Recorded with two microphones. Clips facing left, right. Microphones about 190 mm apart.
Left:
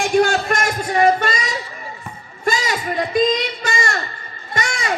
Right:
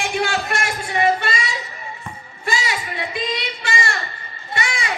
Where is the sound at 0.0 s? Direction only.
45° left (ahead or behind).